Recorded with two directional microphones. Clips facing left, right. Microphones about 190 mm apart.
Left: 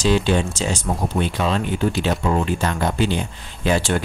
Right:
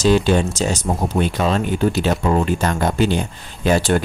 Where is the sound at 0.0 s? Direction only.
45° right (ahead or behind).